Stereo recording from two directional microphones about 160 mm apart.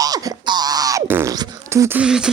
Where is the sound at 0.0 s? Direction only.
20° right (ahead or behind).